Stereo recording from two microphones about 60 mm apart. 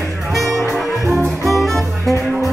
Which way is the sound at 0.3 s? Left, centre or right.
Centre.